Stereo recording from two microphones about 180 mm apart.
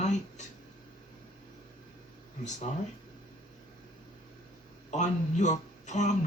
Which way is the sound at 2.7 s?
40° left (ahead or behind).